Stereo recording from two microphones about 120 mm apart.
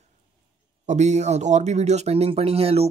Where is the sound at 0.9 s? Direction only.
75° right (ahead or behind).